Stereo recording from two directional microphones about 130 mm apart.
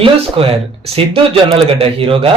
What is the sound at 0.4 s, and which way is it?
A man's voice, 45° right (ahead or behind).